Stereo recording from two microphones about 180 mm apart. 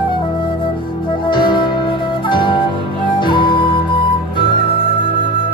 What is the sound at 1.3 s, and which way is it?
Music, 25° left (ahead or behind).